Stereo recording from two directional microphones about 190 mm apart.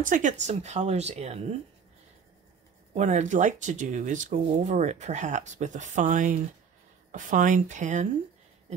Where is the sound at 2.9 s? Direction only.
40° right (ahead or behind).